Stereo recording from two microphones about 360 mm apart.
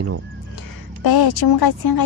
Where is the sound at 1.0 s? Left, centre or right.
Left.